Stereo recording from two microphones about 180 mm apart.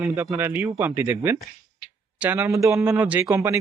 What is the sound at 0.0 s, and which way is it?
A man's voice, 15° right (ahead or behind).